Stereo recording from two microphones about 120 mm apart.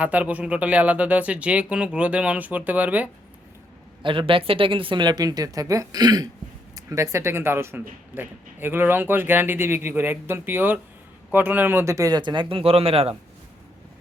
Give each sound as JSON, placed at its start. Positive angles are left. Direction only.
{"t": 0.0, "sound": "speech", "side_deg": -10}
{"t": 4.0, "sound": "a woman's voice", "side_deg": -45}